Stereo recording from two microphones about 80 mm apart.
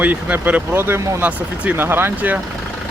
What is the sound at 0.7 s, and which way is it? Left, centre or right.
Speech, right.